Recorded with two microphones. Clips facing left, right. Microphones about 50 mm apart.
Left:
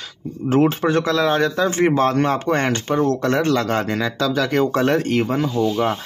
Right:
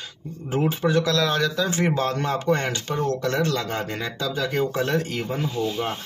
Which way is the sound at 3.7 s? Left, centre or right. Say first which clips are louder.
Left 7 dB; left.